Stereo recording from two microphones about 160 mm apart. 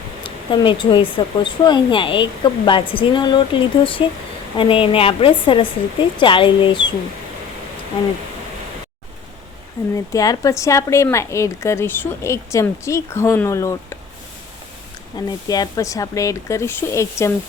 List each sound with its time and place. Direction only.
0.2 s speech: 30° left (ahead or behind)
9.9 s a woman's voice: 20° left (ahead or behind)
15.1 s speech: 25° left (ahead or behind)